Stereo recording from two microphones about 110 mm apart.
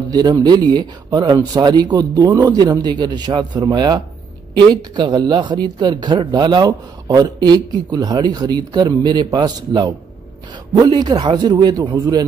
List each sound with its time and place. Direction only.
0.1 s speech: 40° right (ahead or behind)